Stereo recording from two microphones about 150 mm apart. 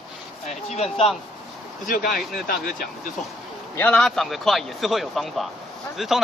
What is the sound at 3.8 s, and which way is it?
Speech, 10° left (ahead or behind).